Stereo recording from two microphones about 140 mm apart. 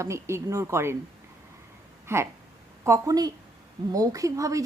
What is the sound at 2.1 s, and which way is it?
Speech, 20° right (ahead or behind).